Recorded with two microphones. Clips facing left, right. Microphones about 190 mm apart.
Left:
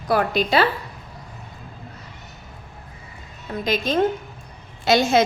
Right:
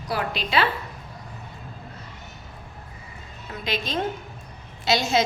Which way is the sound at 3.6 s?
45° left (ahead or behind).